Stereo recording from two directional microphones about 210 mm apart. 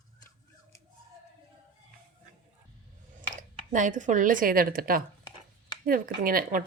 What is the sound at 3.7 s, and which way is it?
A woman's voice, 35° right (ahead or behind).